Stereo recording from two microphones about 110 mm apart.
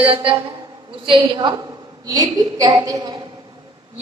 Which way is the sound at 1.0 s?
45° right (ahead or behind).